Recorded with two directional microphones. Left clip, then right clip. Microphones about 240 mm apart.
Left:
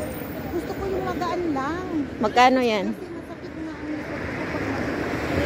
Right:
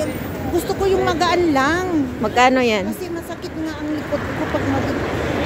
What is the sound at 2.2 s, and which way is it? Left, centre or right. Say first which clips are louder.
Speech: right 2 dB; centre.